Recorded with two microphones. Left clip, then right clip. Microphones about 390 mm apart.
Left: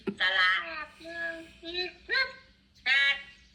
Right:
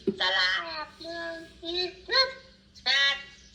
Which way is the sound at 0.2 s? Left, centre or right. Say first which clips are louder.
Left 2 dB; centre.